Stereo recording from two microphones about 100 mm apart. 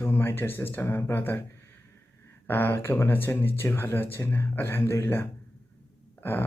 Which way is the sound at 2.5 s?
20° left (ahead or behind).